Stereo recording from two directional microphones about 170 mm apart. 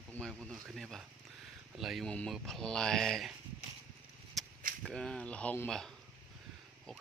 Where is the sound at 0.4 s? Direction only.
Centre (ahead or behind).